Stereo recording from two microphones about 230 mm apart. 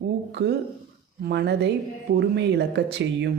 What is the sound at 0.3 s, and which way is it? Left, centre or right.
A woman's voice, right.